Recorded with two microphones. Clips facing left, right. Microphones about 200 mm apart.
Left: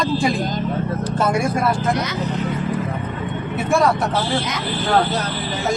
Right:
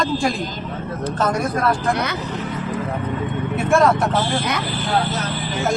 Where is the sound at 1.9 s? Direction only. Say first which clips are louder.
Even; 60° right (ahead or behind).